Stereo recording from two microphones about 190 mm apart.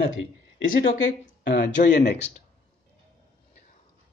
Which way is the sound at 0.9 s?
75° left (ahead or behind).